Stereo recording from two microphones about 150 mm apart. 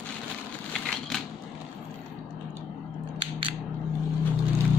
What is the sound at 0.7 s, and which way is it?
Crushing, 5° left (ahead or behind).